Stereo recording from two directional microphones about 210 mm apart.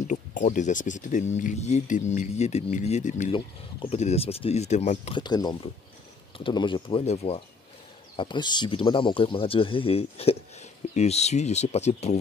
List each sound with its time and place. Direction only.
0.0 s speech: 35° left (ahead or behind)